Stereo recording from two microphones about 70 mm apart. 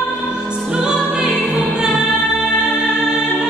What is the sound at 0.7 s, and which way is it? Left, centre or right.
Music, centre.